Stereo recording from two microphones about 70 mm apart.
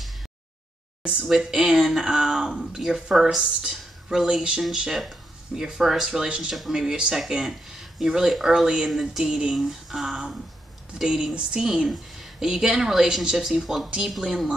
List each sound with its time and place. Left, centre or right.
1.0 s a woman's voice: centre